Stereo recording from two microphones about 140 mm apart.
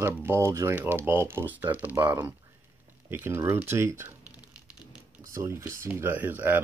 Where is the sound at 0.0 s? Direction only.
15° right (ahead or behind).